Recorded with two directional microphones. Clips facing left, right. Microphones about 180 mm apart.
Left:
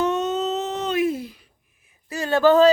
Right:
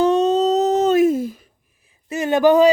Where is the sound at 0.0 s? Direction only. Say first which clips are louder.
Right 7 dB; 30° right (ahead or behind).